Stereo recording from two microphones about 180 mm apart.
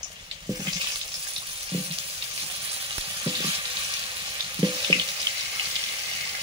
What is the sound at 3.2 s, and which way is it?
Frying, 25° right (ahead or behind).